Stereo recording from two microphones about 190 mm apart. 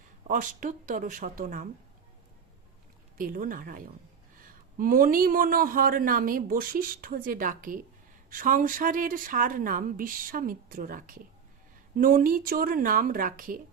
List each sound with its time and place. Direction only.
0.3 s a man's voice: 45° right (ahead or behind)
3.2 s a man's voice: 45° right (ahead or behind)